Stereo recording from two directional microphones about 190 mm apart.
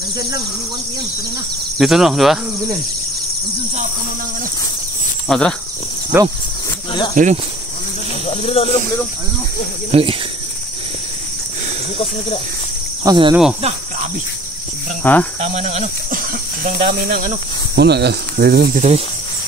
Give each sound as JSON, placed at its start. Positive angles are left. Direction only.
{"t": 1.8, "sound": "speech", "side_deg": 0}
{"t": 5.3, "sound": "speech", "side_deg": 5}
{"t": 6.1, "sound": "speech", "side_deg": -10}
{"t": 7.2, "sound": "speech", "side_deg": -45}
{"t": 8.4, "sound": "speech", "side_deg": 30}
{"t": 9.8, "sound": "speech", "side_deg": -30}
{"t": 13.0, "sound": "speech", "side_deg": -20}
{"t": 15.0, "sound": "speech", "side_deg": 10}
{"t": 15.4, "sound": "speech", "side_deg": -35}
{"t": 17.7, "sound": "speech", "side_deg": -60}
{"t": 18.8, "sound": "speech", "side_deg": -40}